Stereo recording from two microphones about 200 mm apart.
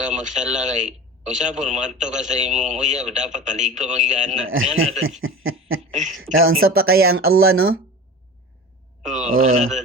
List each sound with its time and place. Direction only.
0.0 s speech: 35° right (ahead or behind)
4.4 s a man's voice: 85° right
5.2 s chuckle: 90° right
5.9 s speech: 35° right (ahead or behind)
6.3 s speech: 90° right
9.3 s speech: 90° right